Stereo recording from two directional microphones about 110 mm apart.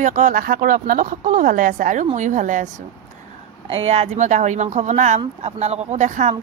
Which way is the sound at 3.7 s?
70° right (ahead or behind).